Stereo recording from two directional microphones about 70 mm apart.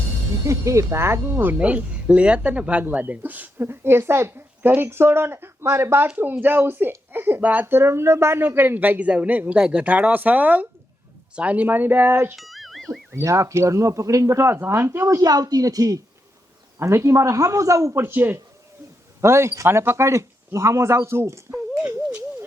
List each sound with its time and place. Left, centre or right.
0.4 s a woman's voice: right
3.7 s a woman's voice: right
12.4 s music: centre
13.1 s speech: right
15.2 s a woman's voice: right
16.7 s speech: right
18.0 s a woman's voice: right
19.2 s speech: right
21.8 s a sound: right